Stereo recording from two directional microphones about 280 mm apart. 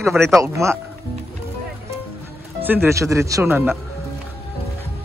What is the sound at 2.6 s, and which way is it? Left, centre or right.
Speech, centre.